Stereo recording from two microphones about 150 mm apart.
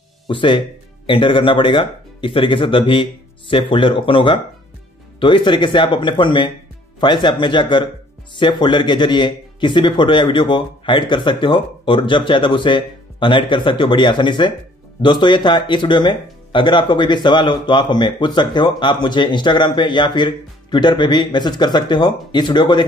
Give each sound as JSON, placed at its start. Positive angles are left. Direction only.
{"t": 0.3, "sound": "speech", "side_deg": 35}